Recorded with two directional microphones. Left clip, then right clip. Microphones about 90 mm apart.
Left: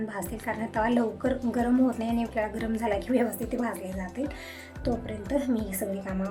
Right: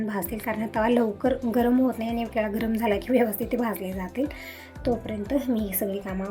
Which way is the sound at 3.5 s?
35° right (ahead or behind).